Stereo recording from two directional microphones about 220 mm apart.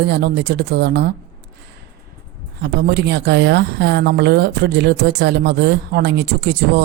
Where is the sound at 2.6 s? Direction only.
50° right (ahead or behind).